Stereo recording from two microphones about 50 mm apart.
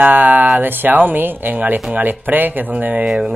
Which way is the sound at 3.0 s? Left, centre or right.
Centre.